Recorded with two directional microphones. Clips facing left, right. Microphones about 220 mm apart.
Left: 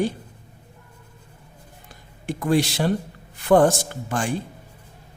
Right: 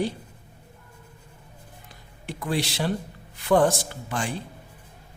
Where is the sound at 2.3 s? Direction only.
45° left (ahead or behind).